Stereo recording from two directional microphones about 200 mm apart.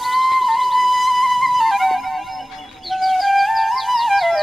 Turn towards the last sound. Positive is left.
turn(degrees=0)  # may be behind; listen again after turning